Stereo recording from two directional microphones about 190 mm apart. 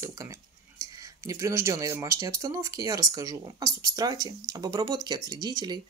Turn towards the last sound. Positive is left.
turn(degrees=-20)  # may be behind; listen again after turning